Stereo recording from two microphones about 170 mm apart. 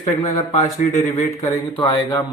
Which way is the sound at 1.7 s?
30° left (ahead or behind).